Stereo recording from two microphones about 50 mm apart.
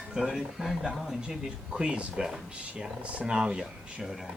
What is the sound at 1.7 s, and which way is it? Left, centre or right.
Speech, right.